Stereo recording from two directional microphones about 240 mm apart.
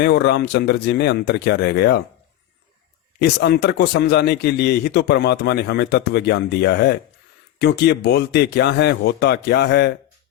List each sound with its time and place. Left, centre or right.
0.0 s speech: left
3.2 s speech: left